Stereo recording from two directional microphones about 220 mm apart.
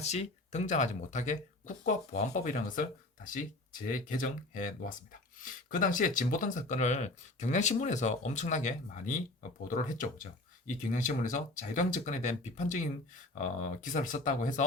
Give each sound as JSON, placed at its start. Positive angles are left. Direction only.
{"t": 0.0, "sound": "speech", "side_deg": 30}